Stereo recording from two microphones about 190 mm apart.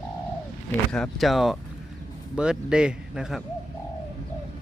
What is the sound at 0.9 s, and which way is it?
Speech, centre (ahead or behind).